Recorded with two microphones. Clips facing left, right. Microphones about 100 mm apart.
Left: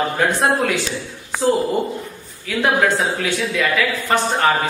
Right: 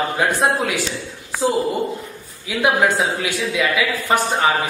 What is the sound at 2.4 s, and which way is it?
A man's voice, 10° right (ahead or behind).